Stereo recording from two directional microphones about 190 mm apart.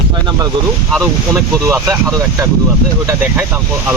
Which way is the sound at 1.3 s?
15° right (ahead or behind).